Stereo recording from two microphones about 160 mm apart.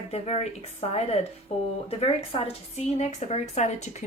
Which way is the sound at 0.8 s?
40° left (ahead or behind).